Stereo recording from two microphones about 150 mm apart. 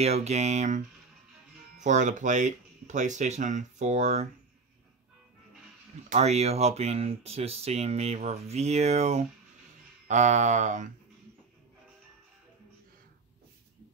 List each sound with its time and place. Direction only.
0.0 s speech: 45° right (ahead or behind)
6.0 s speech: 50° right (ahead or behind)